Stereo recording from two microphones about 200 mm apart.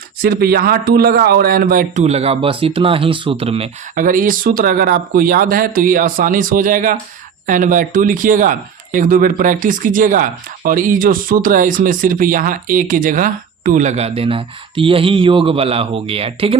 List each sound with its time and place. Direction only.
0.2 s speech: 50° right (ahead or behind); by 3.7 s 30° right (ahead or behind)
3.9 s speech: 40° right (ahead or behind)